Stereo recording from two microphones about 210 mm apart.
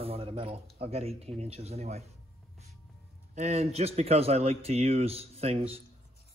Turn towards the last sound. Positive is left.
turn(degrees=-30)  # may be behind; listen again after turning